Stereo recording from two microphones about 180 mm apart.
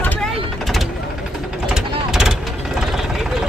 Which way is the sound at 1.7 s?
5° right (ahead or behind).